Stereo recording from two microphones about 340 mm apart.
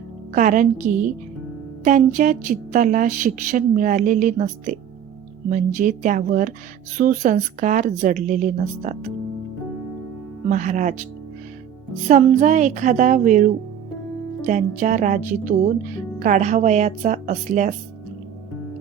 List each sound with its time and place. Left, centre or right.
0.3 s speech: right
10.5 s speech: right
12.0 s speech: right